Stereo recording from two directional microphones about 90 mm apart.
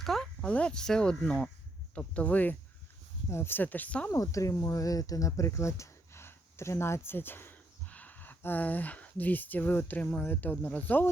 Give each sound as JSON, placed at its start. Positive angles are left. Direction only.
{"t": 0.0, "sound": "a sound", "side_deg": 0}
{"t": 0.4, "sound": "speech", "side_deg": 15}
{"t": 3.2, "sound": "speech", "side_deg": 30}
{"t": 4.1, "sound": "speech", "side_deg": 35}